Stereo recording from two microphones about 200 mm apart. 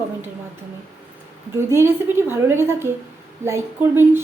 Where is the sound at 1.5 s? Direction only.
10° right (ahead or behind).